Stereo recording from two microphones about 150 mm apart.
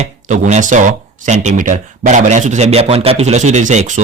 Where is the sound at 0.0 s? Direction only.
50° right (ahead or behind).